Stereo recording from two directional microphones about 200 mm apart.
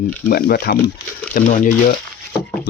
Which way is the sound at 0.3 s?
50° left (ahead or behind).